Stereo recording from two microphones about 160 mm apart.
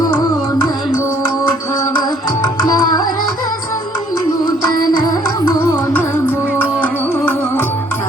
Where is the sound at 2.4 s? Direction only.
25° left (ahead or behind).